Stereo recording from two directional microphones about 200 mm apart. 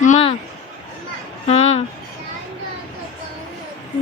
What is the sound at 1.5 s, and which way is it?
Speech, 30° left (ahead or behind).